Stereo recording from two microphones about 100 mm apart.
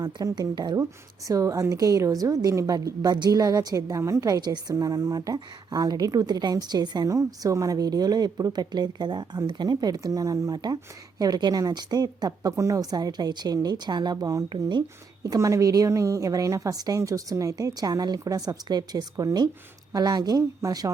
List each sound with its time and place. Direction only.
0.0 s a woman's voice: 40° right (ahead or behind)
1.3 s a woman's voice: 35° right (ahead or behind)